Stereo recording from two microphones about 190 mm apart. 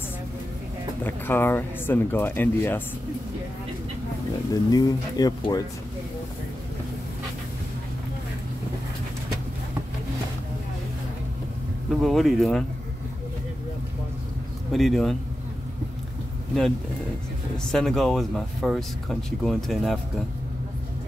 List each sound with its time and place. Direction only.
1.0 s speech: 10° left (ahead or behind)
4.5 s speech: 20° left (ahead or behind)
12.0 s speech: centre (ahead or behind)
14.7 s speech: centre (ahead or behind)
17.6 s speech: 5° left (ahead or behind)